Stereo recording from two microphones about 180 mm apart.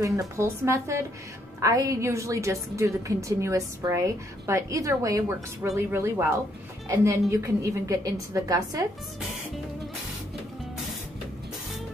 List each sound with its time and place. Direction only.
0.0 s a woman's voice: 15° right (ahead or behind)